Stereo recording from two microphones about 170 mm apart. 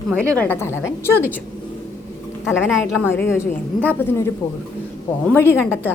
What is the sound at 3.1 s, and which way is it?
A woman's voice, 15° left (ahead or behind).